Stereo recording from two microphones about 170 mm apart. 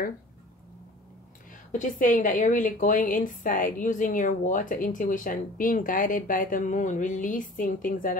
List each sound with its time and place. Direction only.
1.7 s a woman's voice: 50° left (ahead or behind)